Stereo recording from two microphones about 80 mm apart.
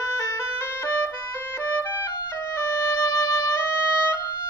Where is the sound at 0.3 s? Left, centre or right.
Left.